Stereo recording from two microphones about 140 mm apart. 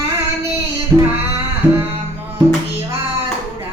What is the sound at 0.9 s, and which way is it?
Female singing, 20° right (ahead or behind).